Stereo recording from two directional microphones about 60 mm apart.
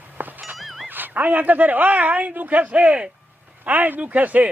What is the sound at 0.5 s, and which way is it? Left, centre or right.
Dog, centre.